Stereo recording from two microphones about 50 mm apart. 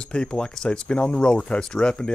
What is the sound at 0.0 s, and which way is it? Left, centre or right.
Speech, centre.